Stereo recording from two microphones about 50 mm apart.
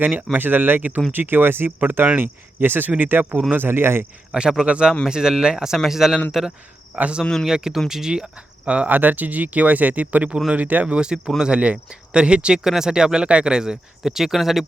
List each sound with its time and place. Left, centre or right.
0.2 s speech: right
4.4 s speech: centre
5.0 s speech: centre
6.9 s speech: right
7.4 s speech: centre
8.6 s speech: right
8.9 s speech: right
10.9 s speech: centre